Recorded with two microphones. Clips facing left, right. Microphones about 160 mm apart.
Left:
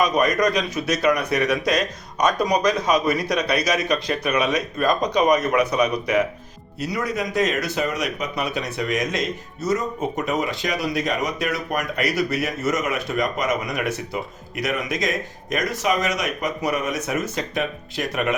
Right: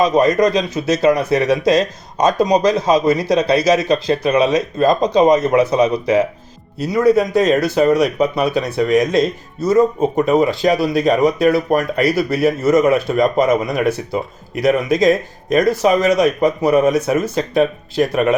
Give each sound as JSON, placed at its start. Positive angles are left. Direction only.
{"t": 0.0, "sound": "a man's voice", "side_deg": -25}